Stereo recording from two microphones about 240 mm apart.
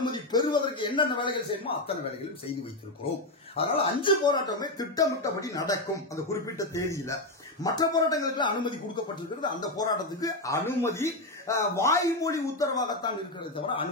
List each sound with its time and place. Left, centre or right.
0.0 s a man's voice: centre
3.5 s speech: left